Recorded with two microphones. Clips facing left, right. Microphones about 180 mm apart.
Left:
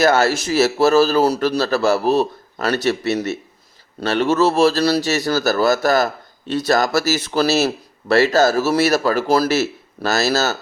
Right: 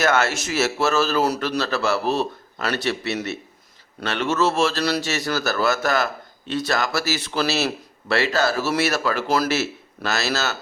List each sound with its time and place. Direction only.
0.0 s speech: 35° left (ahead or behind)